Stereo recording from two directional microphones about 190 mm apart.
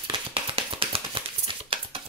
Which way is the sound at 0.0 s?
30° right (ahead or behind).